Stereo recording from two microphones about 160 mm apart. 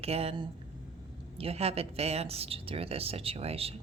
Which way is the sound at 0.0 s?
40° right (ahead or behind).